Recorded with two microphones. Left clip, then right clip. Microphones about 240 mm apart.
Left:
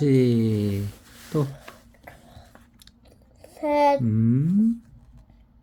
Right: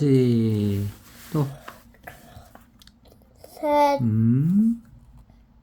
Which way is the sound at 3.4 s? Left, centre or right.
Centre.